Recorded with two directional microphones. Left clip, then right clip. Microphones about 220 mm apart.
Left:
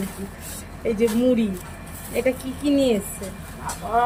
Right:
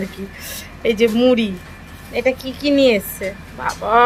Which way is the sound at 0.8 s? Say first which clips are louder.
Right 6 dB; 45° right (ahead or behind).